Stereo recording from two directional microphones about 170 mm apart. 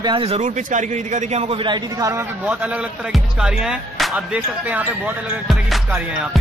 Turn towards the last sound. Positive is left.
turn(degrees=0)  # may be behind; listen again after turning